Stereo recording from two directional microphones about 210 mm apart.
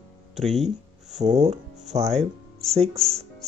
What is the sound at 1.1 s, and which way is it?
Speech, 35° right (ahead or behind).